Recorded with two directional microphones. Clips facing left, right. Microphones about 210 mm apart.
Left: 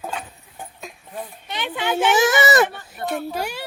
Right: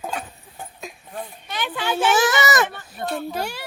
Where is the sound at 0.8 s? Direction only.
Centre (ahead or behind).